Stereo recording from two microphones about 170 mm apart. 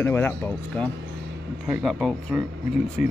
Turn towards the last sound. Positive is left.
turn(degrees=55)  # may be behind; listen again after turning